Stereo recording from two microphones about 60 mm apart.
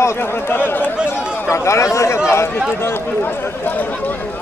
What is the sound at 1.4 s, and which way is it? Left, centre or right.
Speech, left.